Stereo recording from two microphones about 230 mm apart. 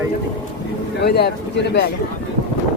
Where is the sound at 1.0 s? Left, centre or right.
Left.